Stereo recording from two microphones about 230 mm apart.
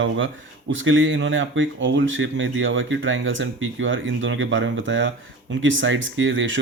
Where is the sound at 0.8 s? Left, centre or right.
Right.